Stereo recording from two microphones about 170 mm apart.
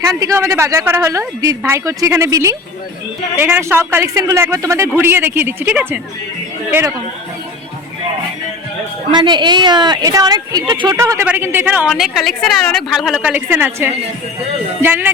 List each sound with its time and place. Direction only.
0.1 s a woman's voice: 20° right (ahead or behind)
9.1 s a woman's voice: 25° right (ahead or behind)